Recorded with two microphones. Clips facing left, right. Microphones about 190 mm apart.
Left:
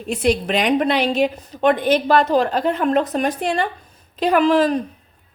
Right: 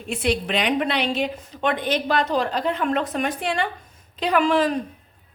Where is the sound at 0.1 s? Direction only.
40° left (ahead or behind).